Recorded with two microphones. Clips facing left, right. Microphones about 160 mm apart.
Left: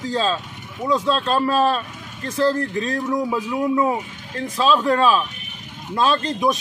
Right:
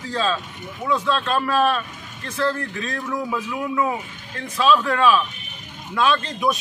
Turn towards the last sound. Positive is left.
turn(degrees=35)  # may be behind; listen again after turning